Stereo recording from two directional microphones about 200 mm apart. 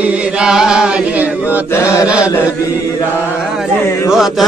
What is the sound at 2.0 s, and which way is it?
Chant, 5° right (ahead or behind).